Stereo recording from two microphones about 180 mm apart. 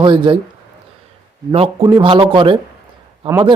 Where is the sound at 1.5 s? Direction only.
30° right (ahead or behind).